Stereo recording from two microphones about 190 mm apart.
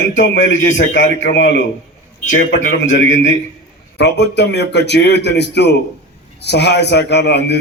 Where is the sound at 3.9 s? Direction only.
65° left (ahead or behind).